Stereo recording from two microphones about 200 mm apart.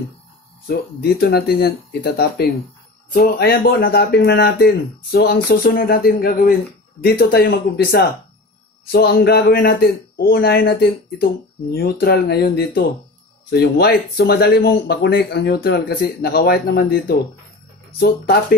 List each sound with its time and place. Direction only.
0.7 s speech: 50° left (ahead or behind)